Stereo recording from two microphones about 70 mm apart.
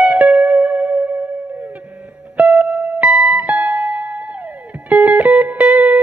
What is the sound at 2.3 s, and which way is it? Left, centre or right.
Music, right.